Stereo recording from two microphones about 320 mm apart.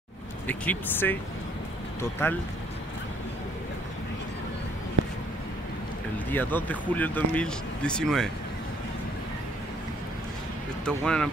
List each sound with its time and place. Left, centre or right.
0.5 s speech: centre
6.1 s speech: centre
10.9 s speech: centre